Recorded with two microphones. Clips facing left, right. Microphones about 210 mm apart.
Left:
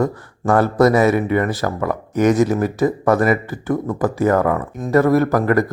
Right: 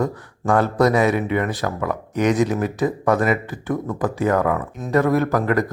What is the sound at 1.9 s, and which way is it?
Speech, 45° left (ahead or behind).